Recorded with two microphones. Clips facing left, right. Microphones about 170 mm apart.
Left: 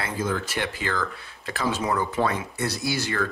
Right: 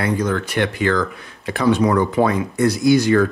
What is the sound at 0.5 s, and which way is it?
Speech, 70° right (ahead or behind).